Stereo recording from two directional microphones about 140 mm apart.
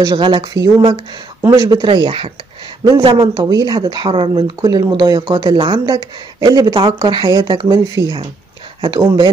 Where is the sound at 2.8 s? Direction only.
30° right (ahead or behind).